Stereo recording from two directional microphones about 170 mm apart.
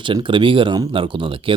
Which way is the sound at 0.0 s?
30° right (ahead or behind).